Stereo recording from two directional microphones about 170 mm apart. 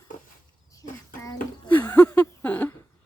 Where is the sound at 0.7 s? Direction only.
20° left (ahead or behind).